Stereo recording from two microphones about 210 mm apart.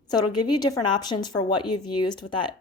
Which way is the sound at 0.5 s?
20° left (ahead or behind).